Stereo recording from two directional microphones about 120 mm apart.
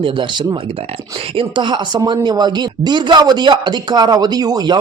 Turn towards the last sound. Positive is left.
turn(degrees=-35)  # may be behind; listen again after turning